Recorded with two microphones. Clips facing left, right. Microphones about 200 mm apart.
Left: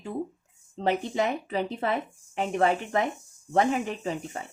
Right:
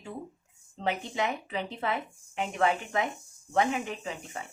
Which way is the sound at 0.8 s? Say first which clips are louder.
Left 5 dB; 40° left (ahead or behind).